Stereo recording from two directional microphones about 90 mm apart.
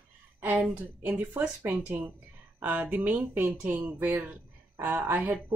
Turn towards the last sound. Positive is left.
turn(degrees=-20)  # may be behind; listen again after turning